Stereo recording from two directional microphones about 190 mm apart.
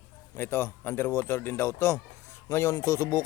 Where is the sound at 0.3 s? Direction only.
10° left (ahead or behind).